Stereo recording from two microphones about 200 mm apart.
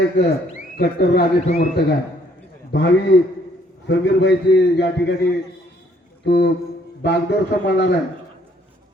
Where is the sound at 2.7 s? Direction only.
55° left (ahead or behind).